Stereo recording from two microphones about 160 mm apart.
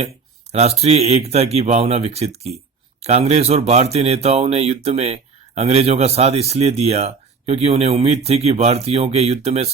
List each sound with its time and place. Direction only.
0.8 s speech: 40° right (ahead or behind)